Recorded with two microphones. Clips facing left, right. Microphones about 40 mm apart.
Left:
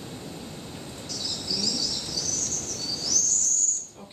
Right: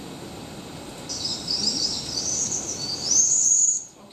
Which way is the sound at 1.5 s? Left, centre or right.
Centre.